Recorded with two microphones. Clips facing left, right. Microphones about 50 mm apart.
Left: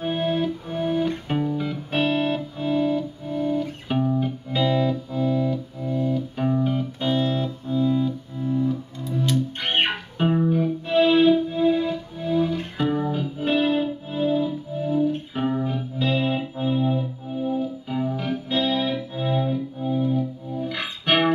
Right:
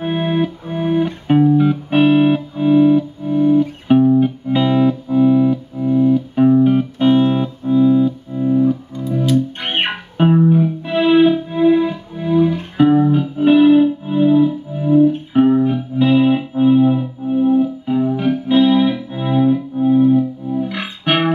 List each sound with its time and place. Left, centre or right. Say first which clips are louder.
0.0 s music: right 5 dB; right
4.5 s music: right 5 dB; right
6.6 s music: right 11 dB; right